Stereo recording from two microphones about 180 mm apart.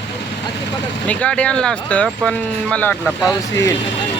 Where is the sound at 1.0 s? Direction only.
5° left (ahead or behind).